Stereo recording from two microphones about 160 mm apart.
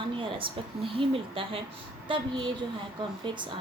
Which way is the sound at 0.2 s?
30° right (ahead or behind).